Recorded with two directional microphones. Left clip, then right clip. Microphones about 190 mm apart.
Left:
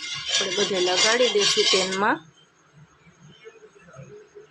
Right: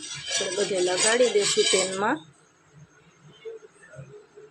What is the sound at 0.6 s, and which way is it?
Speech, centre (ahead or behind).